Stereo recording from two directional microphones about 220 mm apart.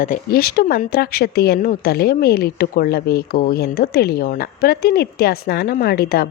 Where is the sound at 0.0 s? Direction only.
40° left (ahead or behind).